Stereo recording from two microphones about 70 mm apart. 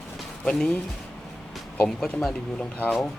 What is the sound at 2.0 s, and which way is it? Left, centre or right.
Speech, centre.